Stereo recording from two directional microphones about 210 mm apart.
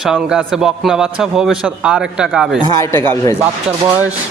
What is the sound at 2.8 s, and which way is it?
Speech, 10° left (ahead or behind).